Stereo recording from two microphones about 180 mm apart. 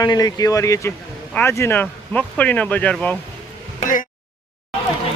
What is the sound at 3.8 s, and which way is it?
Speech, 45° left (ahead or behind).